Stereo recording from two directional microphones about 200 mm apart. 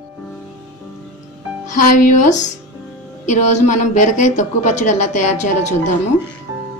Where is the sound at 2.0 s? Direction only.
35° left (ahead or behind).